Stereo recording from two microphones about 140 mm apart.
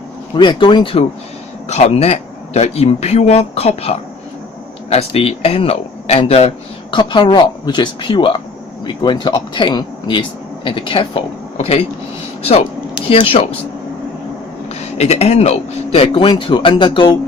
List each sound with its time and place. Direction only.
0.3 s speech: 35° left (ahead or behind)
6.9 s speech: 35° left (ahead or behind)
14.8 s speech: 50° left (ahead or behind)